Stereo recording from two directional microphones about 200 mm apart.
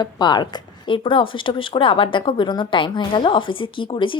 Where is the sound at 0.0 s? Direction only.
20° left (ahead or behind).